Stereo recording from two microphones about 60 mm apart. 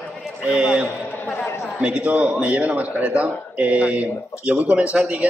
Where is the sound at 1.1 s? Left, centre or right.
Left.